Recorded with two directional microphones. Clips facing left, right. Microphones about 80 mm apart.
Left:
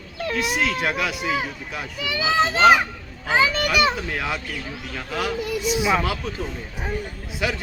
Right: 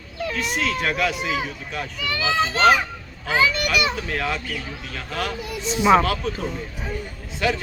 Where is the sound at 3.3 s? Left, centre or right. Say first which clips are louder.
Left 1 dB; left.